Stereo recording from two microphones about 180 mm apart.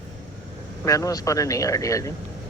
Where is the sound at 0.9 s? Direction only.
20° left (ahead or behind).